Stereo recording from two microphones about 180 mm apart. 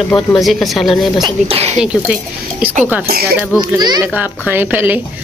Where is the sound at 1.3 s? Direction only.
35° right (ahead or behind).